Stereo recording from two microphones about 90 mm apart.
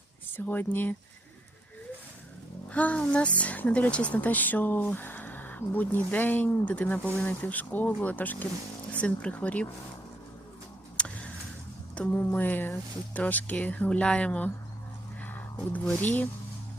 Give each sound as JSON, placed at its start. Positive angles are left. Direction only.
{"t": 0.3, "sound": "a woman's voice", "side_deg": 20}
{"t": 2.6, "sound": "a woman's voice", "side_deg": 15}
{"t": 11.0, "sound": "vehicle", "side_deg": 10}
{"t": 11.9, "sound": "a woman's voice", "side_deg": 20}